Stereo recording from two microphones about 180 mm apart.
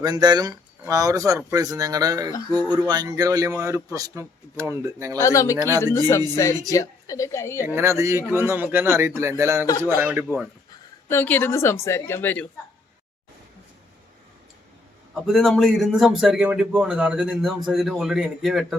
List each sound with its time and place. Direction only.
0.0 s a man's voice: 20° right (ahead or behind)
5.2 s a woman's voice: 15° left (ahead or behind)
5.5 s speech: 20° right (ahead or behind)
5.8 s a woman's voice: 15° left (ahead or behind)
7.6 s a man's voice: 15° right (ahead or behind)
11.1 s a woman's voice: 10° left (ahead or behind)
15.1 s a man's voice: centre (ahead or behind)